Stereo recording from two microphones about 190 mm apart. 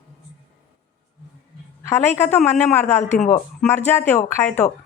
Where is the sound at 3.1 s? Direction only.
45° left (ahead or behind).